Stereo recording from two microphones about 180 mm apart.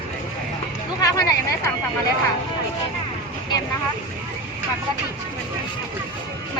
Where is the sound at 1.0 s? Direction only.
20° left (ahead or behind).